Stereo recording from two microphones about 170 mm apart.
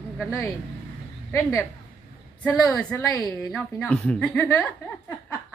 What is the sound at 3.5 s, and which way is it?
A woman's voice, centre (ahead or behind).